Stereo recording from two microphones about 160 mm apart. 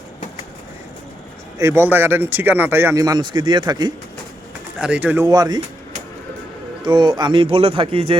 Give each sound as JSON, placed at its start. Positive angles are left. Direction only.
{"t": 1.5, "sound": "speech", "side_deg": -15}
{"t": 4.8, "sound": "speech", "side_deg": -10}
{"t": 5.3, "sound": "speech", "side_deg": -25}
{"t": 6.8, "sound": "speech", "side_deg": -30}